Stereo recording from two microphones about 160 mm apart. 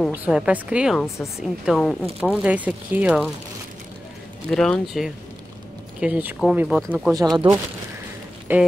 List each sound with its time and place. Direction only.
0.1 s speech: 5° right (ahead or behind)
4.5 s speech: 5° left (ahead or behind)
7.4 s speech: 35° right (ahead or behind)
8.5 s speech: 10° right (ahead or behind)